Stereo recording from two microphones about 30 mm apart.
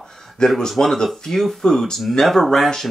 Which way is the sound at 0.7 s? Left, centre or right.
Centre.